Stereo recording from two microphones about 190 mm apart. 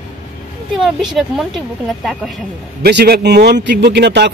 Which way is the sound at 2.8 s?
60° right (ahead or behind).